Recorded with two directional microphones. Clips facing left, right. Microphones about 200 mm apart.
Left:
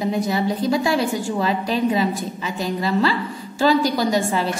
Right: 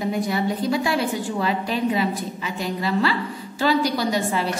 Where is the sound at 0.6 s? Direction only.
40° left (ahead or behind).